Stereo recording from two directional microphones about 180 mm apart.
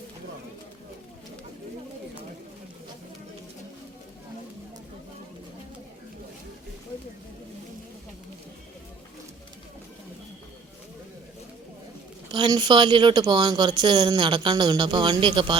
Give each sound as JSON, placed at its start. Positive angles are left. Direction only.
{"t": 12.3, "sound": "speech", "side_deg": -25}